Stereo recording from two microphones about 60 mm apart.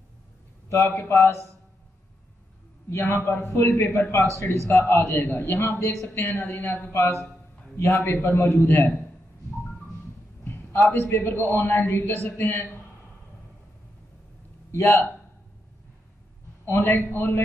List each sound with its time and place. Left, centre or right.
0.7 s a man's voice: left
1.1 s a man's voice: left
2.9 s a man's voice: left
10.4 s a sound: left
10.9 s a man's voice: left
14.7 s a man's voice: left
16.6 s a man's voice: left